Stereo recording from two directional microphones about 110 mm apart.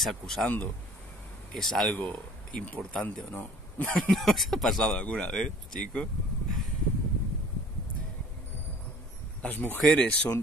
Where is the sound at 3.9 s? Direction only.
5° left (ahead or behind).